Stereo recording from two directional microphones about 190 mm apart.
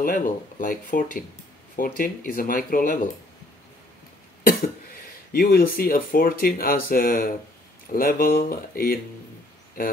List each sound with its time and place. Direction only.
0.0 s speech: 45° left (ahead or behind)
5.3 s speech: 50° left (ahead or behind)